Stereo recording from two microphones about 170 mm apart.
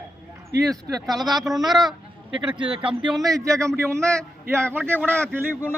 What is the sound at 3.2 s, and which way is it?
A man's voice, 20° right (ahead or behind).